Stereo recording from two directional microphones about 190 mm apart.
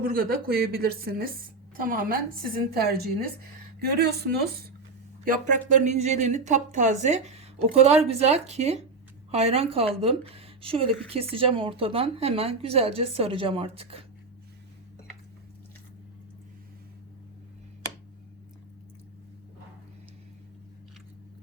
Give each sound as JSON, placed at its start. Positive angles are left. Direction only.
{"t": 0.0, "sound": "a woman's voice", "side_deg": -50}
{"t": 5.2, "sound": "a woman's voice", "side_deg": -45}